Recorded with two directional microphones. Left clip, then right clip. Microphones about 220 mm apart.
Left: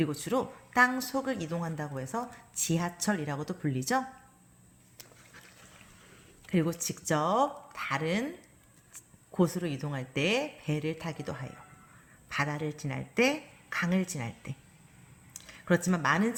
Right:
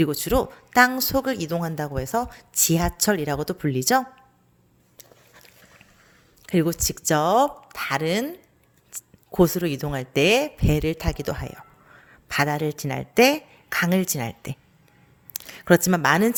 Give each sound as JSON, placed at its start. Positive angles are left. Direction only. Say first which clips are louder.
{"t": 0.0, "sound": "speech", "louder": "right 9 dB", "side_deg": -45}
{"t": 6.4, "sound": "speech", "louder": "right 8 dB", "side_deg": -50}